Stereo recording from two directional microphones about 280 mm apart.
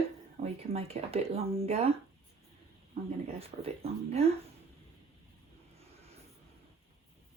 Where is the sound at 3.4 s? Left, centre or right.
Right.